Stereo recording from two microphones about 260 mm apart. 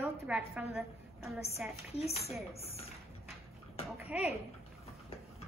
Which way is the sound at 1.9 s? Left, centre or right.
Left.